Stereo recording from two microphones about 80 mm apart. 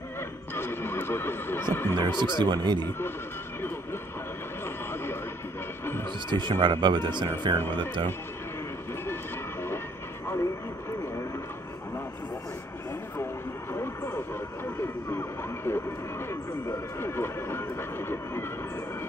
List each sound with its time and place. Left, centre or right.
0.6 s neigh: left
2.0 s speech: right
6.3 s speech: right
9.0 s a sound: left
13.7 s vehicle: left
14.8 s a sound: left